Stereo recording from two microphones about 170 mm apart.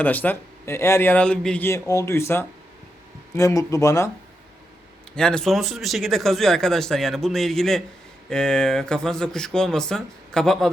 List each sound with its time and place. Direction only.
0.0 s speech: 10° left (ahead or behind)
5.1 s speech: 5° left (ahead or behind)